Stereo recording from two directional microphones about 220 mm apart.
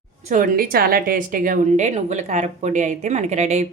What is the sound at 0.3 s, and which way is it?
A woman's voice, 40° right (ahead or behind).